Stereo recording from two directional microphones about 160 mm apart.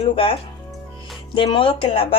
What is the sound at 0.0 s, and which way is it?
A woman's voice, 35° left (ahead or behind).